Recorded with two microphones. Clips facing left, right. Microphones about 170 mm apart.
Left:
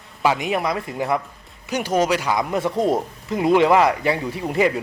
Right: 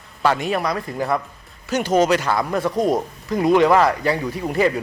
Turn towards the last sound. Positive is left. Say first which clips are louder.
# right 1 dB
turn(degrees=20)  # may be behind; listen again after turning